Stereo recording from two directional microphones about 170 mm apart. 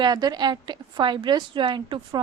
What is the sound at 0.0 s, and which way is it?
A woman's voice, 25° right (ahead or behind).